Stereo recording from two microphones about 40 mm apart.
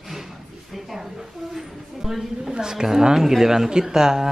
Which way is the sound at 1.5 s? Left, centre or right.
Centre.